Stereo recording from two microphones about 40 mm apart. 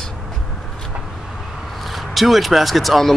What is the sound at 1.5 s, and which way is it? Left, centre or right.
Vehicle, centre.